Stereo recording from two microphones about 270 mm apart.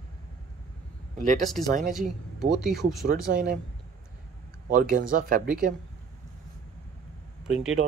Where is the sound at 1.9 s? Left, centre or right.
Centre.